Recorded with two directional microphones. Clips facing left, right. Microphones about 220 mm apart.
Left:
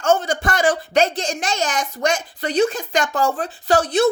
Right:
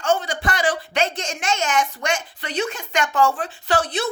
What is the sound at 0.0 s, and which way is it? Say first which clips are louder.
A woman's voice: left 3 dB; 45° left (ahead or behind).